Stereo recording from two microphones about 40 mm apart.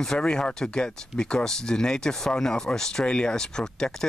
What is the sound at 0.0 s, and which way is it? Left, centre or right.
Speech, centre.